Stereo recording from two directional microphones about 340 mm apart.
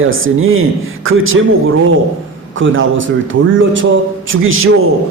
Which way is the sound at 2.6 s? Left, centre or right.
Right.